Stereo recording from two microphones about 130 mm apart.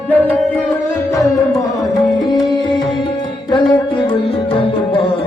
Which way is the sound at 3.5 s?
40° left (ahead or behind).